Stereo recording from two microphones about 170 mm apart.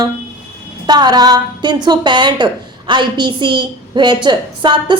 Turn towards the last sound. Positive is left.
turn(degrees=-30)  # may be behind; listen again after turning